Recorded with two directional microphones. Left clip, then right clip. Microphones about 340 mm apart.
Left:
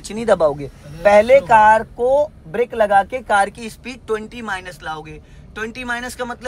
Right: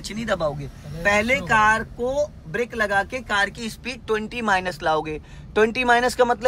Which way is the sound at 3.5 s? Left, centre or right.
Centre.